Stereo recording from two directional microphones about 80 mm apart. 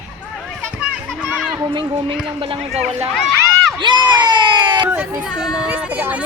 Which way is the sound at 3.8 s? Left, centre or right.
Right.